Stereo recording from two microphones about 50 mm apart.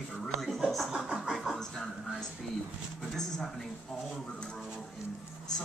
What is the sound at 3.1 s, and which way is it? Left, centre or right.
Speech, centre.